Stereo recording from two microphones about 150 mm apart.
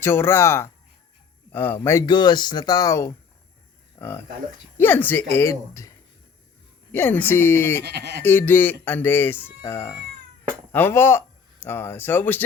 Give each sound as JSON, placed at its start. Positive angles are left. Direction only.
{"t": 0.0, "sound": "speech", "side_deg": 15}
{"t": 2.0, "sound": "speech", "side_deg": 30}
{"t": 6.9, "sound": "speech", "side_deg": 15}
{"t": 7.8, "sound": "speech", "side_deg": -90}
{"t": 8.2, "sound": "speech", "side_deg": 15}